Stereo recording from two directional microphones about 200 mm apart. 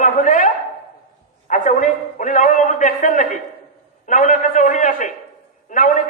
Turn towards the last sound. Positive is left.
turn(degrees=40)  # may be behind; listen again after turning